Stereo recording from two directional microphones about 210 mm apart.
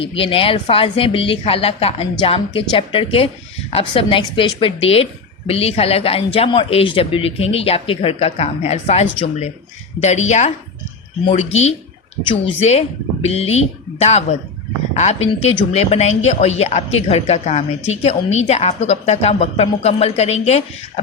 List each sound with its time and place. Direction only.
0.0 s speech: 25° left (ahead or behind)